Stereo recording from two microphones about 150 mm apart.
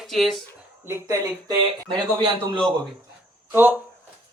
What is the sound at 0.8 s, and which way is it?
Speech, 20° right (ahead or behind).